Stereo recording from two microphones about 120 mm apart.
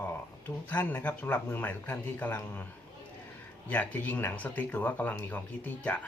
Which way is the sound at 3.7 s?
15° left (ahead or behind).